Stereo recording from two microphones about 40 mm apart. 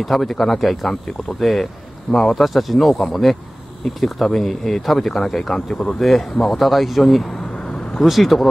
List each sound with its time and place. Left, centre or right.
0.0 s speech: centre
7.3 s vehicle: left
8.1 s speech: centre